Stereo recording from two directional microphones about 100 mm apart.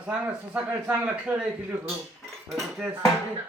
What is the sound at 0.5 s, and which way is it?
Speech, 15° right (ahead or behind).